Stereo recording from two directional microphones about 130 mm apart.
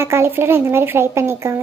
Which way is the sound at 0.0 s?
20° right (ahead or behind).